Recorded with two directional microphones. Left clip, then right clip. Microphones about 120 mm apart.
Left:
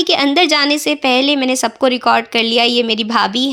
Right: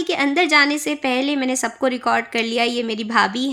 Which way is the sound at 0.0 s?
30° left (ahead or behind).